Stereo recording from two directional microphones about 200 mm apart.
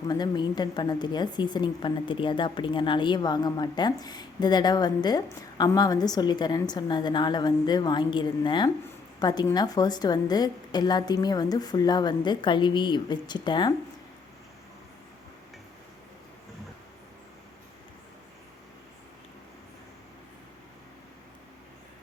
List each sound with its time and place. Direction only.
0.1 s a woman's voice: 20° left (ahead or behind)